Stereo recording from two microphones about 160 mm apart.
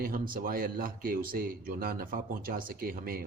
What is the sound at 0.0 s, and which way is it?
Speech, 65° right (ahead or behind).